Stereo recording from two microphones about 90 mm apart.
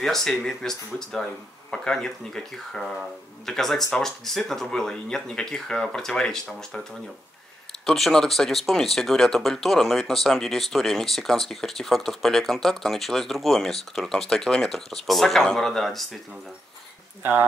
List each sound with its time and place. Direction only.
0.0 s speech: 5° left (ahead or behind)
7.8 s speech: 5° left (ahead or behind)
17.2 s speech: 25° right (ahead or behind)